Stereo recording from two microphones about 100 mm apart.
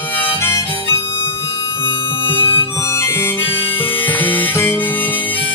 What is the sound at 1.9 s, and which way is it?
Music, 60° left (ahead or behind).